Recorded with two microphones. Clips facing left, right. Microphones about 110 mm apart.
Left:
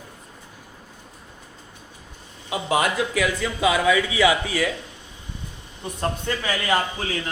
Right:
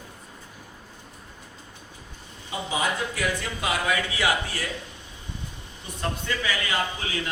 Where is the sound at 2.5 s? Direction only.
75° left (ahead or behind).